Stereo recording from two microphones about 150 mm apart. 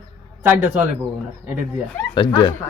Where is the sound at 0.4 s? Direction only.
10° right (ahead or behind).